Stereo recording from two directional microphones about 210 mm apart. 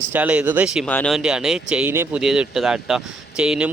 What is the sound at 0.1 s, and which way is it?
Speech, 5° right (ahead or behind).